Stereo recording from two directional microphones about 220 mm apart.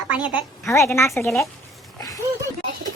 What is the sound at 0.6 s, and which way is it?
Speech, 10° left (ahead or behind).